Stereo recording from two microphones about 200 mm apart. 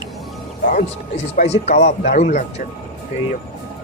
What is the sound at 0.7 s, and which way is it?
Speech, 40° left (ahead or behind).